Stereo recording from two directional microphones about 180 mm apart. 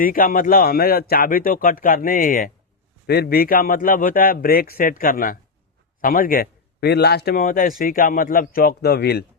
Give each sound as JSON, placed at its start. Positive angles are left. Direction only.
{"t": 0.0, "sound": "a man's voice", "side_deg": 50}
{"t": 3.1, "sound": "a man's voice", "side_deg": 60}